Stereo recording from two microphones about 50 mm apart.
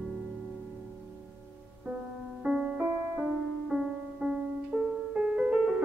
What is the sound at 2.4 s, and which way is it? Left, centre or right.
Music, right.